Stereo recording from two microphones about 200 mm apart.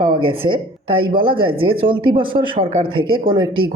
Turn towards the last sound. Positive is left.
turn(degrees=-25)  # may be behind; listen again after turning